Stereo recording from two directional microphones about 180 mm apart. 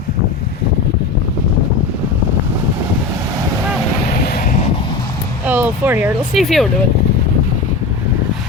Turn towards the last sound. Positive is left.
turn(degrees=0)  # may be behind; listen again after turning